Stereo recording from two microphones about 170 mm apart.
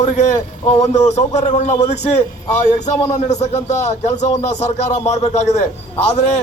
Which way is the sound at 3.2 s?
40° left (ahead or behind).